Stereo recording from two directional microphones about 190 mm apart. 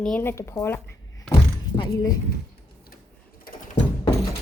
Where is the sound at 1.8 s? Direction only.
20° left (ahead or behind).